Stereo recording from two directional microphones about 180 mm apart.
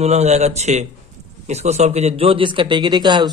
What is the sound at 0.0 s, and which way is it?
A man's voice, 40° right (ahead or behind).